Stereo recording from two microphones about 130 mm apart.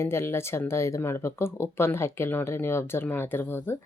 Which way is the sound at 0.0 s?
20° left (ahead or behind).